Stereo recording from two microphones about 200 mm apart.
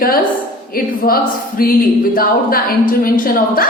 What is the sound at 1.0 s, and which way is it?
A woman's voice, 45° left (ahead or behind).